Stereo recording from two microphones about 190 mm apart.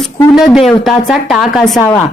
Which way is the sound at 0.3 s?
Centre (ahead or behind).